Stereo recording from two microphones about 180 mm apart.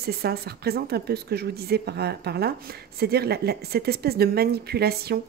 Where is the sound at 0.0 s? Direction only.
60° right (ahead or behind).